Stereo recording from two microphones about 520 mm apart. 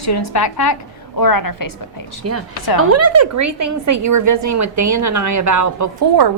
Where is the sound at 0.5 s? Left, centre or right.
Left.